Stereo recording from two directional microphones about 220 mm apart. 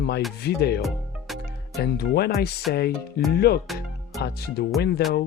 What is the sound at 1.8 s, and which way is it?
Speech, 45° left (ahead or behind).